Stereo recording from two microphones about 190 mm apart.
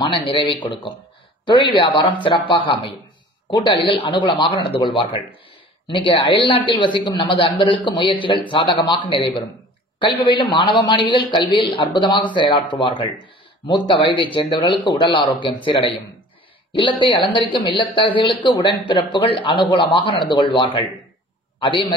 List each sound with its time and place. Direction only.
0.0 s a man's voice: 25° left (ahead or behind)